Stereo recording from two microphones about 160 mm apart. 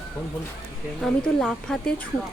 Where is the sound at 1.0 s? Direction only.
5° left (ahead or behind).